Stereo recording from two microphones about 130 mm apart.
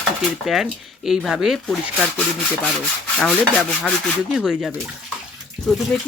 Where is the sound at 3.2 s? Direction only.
5° left (ahead or behind).